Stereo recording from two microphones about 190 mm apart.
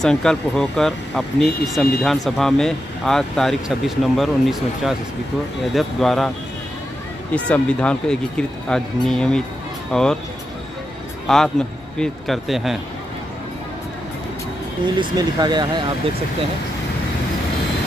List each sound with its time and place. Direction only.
0.0 s speech: 5° left (ahead or behind)
7.3 s speech: 5° left (ahead or behind)
11.2 s speech: 5° left (ahead or behind)
15.0 s speech: 20° right (ahead or behind)